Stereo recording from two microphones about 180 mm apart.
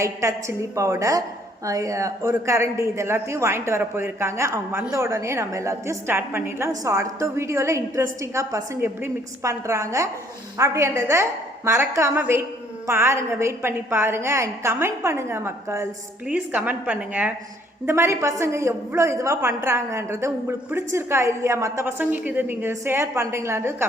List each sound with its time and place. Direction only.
0.0 s a woman's voice: 15° right (ahead or behind)